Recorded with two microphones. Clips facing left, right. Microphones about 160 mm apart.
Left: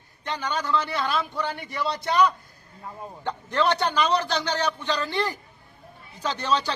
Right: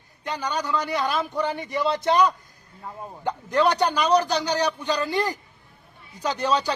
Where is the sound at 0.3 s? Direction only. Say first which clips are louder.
Even; 10° right (ahead or behind).